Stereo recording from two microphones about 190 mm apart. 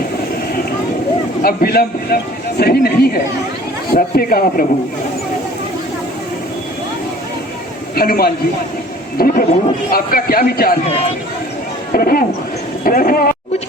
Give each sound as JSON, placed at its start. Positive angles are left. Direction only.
{"t": 1.4, "sound": "a man's voice", "side_deg": 55}
{"t": 7.9, "sound": "a man's voice", "side_deg": 50}
{"t": 11.9, "sound": "a man's voice", "side_deg": 50}